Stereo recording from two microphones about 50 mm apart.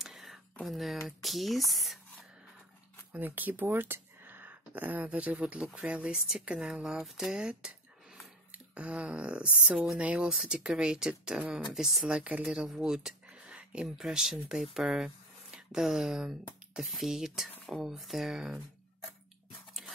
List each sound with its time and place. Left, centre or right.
0.0 s a sound: centre
0.7 s speech: centre
3.1 s speech: right; by 7.1 s centre
7.1 s speech: centre
7.3 s a sound: centre
8.5 s speech: right
10.3 s speech: centre
12.1 s speech: right
13.3 s a sound: right
13.8 s speech: centre
17.6 s speech: centre